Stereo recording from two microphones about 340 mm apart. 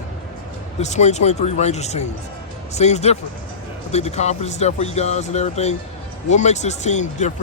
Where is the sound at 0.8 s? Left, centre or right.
Centre.